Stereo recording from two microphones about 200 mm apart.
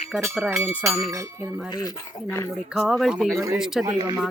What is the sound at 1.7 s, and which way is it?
Speech, 20° left (ahead or behind).